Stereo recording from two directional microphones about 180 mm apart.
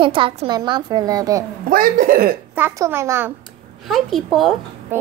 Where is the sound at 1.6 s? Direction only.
50° right (ahead or behind).